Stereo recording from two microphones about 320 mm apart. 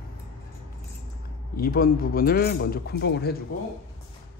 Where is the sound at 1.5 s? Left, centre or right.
Left.